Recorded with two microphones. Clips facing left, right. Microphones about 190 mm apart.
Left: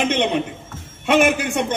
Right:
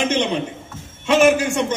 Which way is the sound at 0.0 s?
55° left (ahead or behind).